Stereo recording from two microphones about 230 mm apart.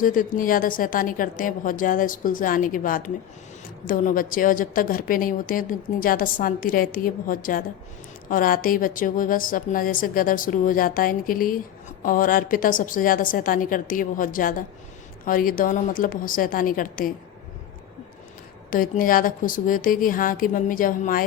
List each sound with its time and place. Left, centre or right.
0.0 s a woman's voice: left
18.7 s a woman's voice: left